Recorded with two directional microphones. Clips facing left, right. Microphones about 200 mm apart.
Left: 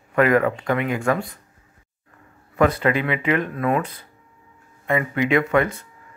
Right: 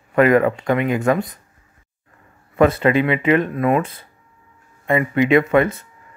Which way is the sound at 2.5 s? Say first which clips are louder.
Right 4 dB; 25° right (ahead or behind).